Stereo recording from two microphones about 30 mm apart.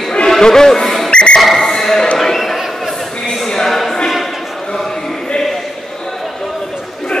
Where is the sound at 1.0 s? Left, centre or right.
Left.